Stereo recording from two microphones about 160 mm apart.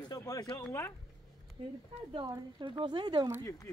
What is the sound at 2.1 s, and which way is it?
A woman's voice, 25° right (ahead or behind).